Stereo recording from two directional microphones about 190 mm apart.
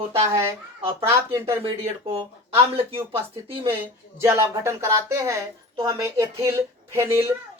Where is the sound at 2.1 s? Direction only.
30° right (ahead or behind).